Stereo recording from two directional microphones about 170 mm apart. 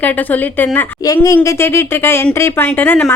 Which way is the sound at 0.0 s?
10° left (ahead or behind).